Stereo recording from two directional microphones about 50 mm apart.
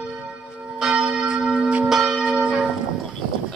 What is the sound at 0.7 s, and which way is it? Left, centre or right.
Church bell, centre.